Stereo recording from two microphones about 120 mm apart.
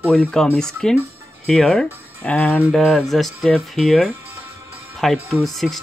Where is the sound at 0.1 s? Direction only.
5° left (ahead or behind).